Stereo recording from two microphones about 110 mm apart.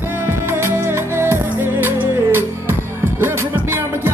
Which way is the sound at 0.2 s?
20° right (ahead or behind).